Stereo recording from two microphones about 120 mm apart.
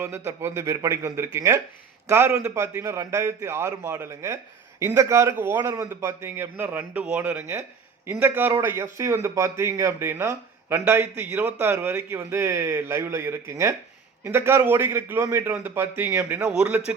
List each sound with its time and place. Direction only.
0.0 s a man's voice: 20° right (ahead or behind)
5.6 s a man's voice: 30° right (ahead or behind)
16.5 s a man's voice: 10° right (ahead or behind)